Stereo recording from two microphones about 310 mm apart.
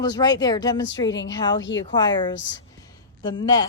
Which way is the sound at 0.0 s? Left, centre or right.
Centre.